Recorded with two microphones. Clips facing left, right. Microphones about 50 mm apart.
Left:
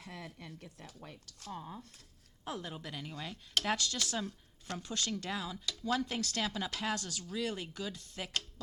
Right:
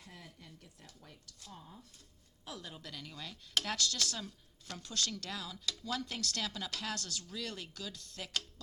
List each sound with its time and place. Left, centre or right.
0.0 s speech: left
2.4 s speech: left